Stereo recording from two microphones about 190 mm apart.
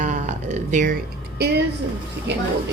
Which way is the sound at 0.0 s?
40° right (ahead or behind).